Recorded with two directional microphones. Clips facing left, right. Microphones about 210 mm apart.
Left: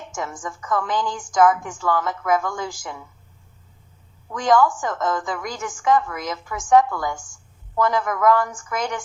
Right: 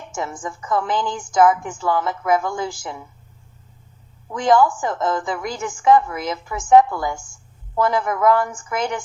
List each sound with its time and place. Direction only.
0.4 s a woman's voice: 25° right (ahead or behind)
4.3 s a woman's voice: 25° right (ahead or behind)